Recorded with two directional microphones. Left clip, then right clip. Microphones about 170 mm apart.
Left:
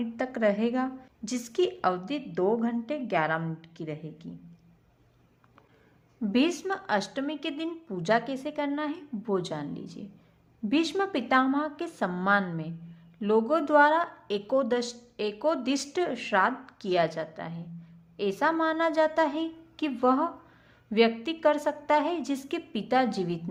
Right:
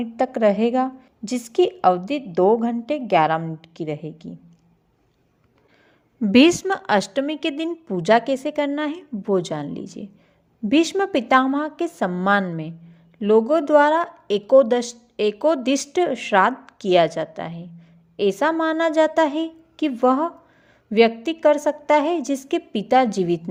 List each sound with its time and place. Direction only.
0.0 s speech: 35° right (ahead or behind)
6.1 s speech: 45° right (ahead or behind)